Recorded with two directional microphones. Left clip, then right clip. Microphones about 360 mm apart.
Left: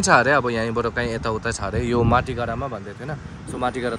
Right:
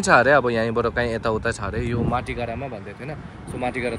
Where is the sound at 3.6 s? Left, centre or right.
Centre.